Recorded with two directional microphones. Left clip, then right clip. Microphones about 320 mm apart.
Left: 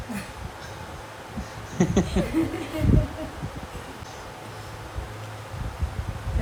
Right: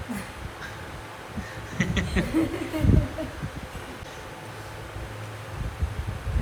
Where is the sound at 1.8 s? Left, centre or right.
Centre.